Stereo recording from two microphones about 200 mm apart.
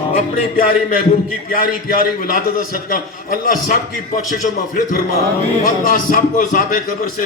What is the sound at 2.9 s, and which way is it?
Speech, 45° left (ahead or behind).